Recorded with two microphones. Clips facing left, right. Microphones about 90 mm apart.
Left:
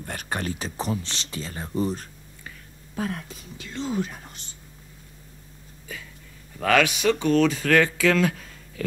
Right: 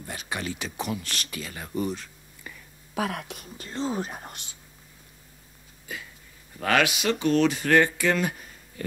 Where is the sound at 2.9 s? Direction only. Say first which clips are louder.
Right 1 dB; 85° right.